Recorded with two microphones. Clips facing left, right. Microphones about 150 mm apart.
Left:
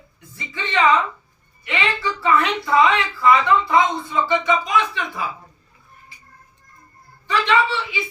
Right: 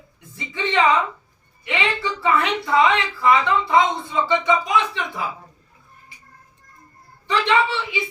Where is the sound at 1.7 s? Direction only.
20° right (ahead or behind).